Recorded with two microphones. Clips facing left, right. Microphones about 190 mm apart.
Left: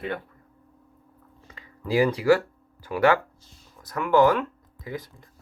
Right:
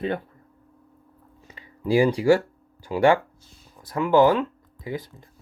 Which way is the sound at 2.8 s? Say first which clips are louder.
Right 2 dB; 25° right (ahead or behind).